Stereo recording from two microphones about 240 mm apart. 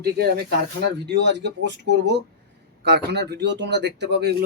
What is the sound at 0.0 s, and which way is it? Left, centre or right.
Speech, right.